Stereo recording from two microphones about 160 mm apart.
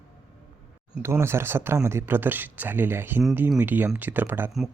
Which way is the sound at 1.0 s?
15° right (ahead or behind).